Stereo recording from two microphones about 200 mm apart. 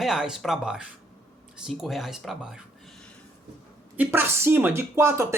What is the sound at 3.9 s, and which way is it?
A woman's voice, 10° right (ahead or behind).